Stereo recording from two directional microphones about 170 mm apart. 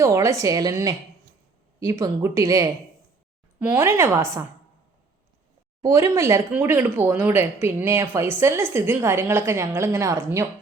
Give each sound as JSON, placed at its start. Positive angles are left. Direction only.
{"t": 0.0, "sound": "a woman's voice", "side_deg": -20}
{"t": 5.8, "sound": "speech", "side_deg": -15}